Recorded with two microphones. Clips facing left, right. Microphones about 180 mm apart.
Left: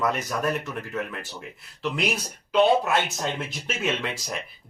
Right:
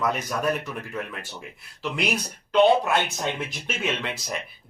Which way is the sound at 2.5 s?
Centre (ahead or behind).